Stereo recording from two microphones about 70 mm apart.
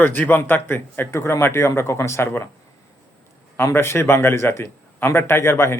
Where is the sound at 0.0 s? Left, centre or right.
Left.